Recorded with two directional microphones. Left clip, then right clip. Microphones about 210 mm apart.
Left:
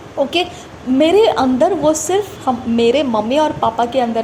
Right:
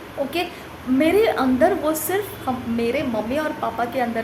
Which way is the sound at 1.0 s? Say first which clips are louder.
Left 6 dB; 25° left (ahead or behind).